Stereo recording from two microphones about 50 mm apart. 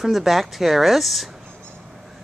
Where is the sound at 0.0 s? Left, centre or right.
Centre.